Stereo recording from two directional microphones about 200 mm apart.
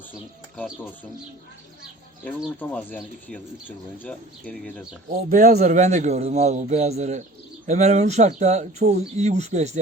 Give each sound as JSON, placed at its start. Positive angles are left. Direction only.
{"t": 0.1, "sound": "speech", "side_deg": 5}
{"t": 2.6, "sound": "speech", "side_deg": 5}
{"t": 5.3, "sound": "speech", "side_deg": -35}